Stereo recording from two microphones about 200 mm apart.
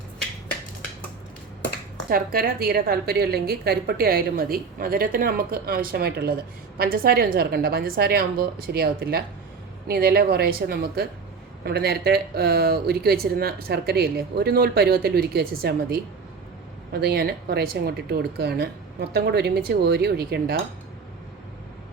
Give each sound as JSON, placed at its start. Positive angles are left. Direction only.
{"t": 2.0, "sound": "speech", "side_deg": -45}